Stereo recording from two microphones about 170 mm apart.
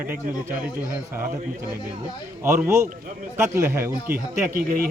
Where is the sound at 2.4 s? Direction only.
15° right (ahead or behind).